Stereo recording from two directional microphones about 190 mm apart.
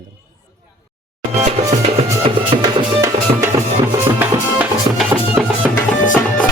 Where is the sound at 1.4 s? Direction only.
35° right (ahead or behind).